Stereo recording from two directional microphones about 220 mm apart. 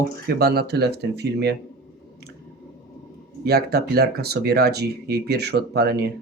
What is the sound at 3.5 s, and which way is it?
Speech, 45° right (ahead or behind).